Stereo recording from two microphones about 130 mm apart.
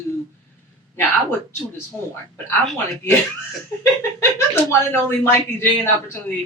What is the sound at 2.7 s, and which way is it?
Speech, 20° left (ahead or behind).